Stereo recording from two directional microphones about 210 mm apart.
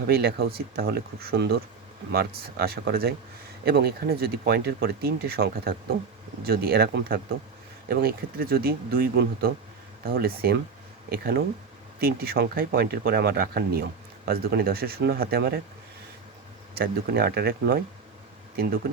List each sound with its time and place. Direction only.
0.1 s speech: 50° right (ahead or behind)
16.7 s speech: 45° right (ahead or behind)